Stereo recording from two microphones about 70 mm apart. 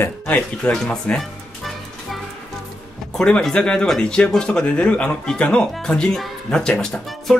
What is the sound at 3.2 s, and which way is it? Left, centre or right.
Speech, centre.